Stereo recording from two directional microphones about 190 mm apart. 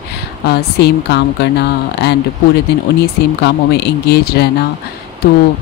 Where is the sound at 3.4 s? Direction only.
60° left (ahead or behind).